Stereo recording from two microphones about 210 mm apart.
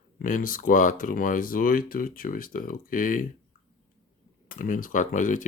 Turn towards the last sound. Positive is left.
turn(degrees=40)  # may be behind; listen again after turning